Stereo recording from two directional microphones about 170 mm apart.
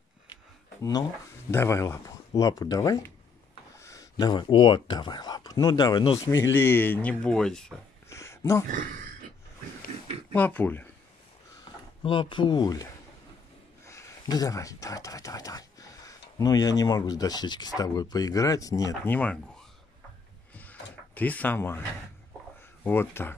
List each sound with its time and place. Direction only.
1.5 s speech: 15° left (ahead or behind)
8.1 s a sound: 15° left (ahead or behind)
10.3 s speech: 10° left (ahead or behind)
12.0 s speech: 30° left (ahead or behind)
19.1 s speech: 5° left (ahead or behind)
20.5 s door: 10° left (ahead or behind)
22.8 s speech: 15° left (ahead or behind)